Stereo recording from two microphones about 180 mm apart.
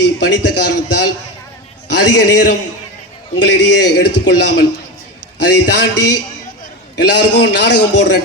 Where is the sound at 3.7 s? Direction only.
70° left (ahead or behind).